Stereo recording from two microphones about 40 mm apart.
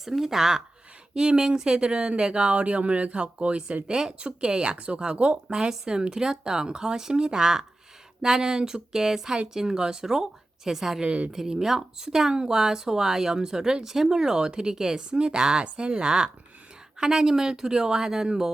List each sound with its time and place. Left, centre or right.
0.0 s speech: centre
11.0 s a woman's voice: right
11.3 s speech: centre